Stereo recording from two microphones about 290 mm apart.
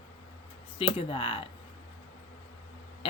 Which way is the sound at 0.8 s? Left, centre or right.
Centre.